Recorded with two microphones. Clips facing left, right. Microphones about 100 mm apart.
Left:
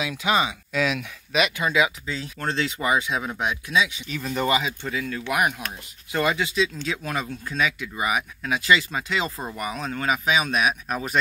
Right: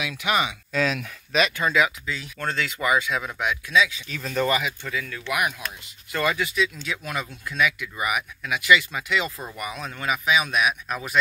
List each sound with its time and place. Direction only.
0.0 s speech: 25° left (ahead or behind)
0.7 s speech: 5° left (ahead or behind)
2.0 s speech: 30° left (ahead or behind)
4.2 s speech: 15° left (ahead or behind); by 11.1 s 40° left (ahead or behind)